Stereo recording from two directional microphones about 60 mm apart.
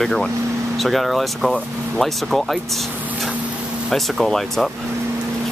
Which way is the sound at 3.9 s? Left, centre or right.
Centre.